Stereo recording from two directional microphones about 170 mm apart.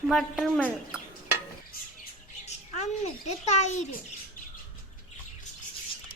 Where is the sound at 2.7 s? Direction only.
40° left (ahead or behind).